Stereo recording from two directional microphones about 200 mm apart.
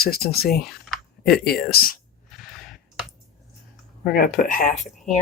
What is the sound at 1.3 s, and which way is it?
Speech, 50° left (ahead or behind).